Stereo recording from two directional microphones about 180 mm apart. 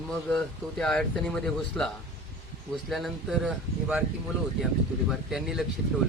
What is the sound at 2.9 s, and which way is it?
Speech, centre (ahead or behind).